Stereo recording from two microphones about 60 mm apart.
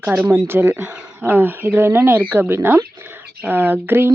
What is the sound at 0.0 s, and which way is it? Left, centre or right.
Speech, right.